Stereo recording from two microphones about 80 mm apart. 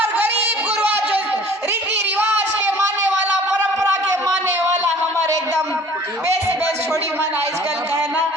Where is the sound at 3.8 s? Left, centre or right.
Right.